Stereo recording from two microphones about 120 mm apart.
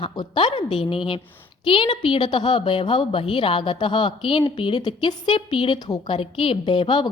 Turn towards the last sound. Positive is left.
turn(degrees=40)  # may be behind; listen again after turning